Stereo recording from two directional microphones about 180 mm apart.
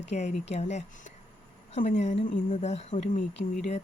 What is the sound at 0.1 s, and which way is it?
Speech, 40° left (ahead or behind).